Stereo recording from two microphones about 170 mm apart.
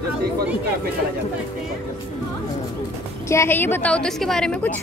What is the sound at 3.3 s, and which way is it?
A woman's voice, 15° left (ahead or behind).